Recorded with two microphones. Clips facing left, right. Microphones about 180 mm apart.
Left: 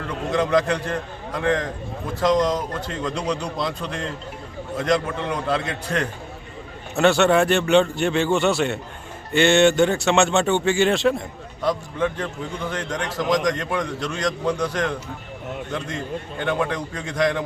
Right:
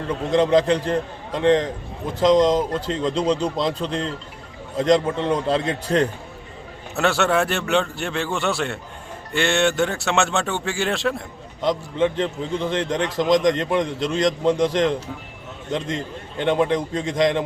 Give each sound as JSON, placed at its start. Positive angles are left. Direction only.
{"t": 0.3, "sound": "a man's voice", "side_deg": -30}
{"t": 6.9, "sound": "a man's voice", "side_deg": 0}
{"t": 11.6, "sound": "a man's voice", "side_deg": -20}
{"t": 16.4, "sound": "a man's voice", "side_deg": -20}